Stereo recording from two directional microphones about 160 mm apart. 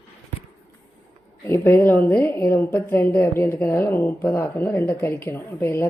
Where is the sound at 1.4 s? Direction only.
15° left (ahead or behind).